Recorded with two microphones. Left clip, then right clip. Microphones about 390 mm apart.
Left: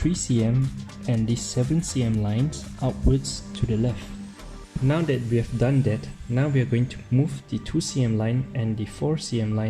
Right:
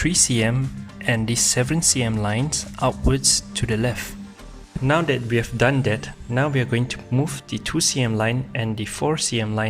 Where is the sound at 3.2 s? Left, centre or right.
Centre.